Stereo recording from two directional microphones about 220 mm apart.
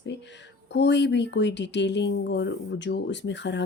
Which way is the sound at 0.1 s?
50° left (ahead or behind).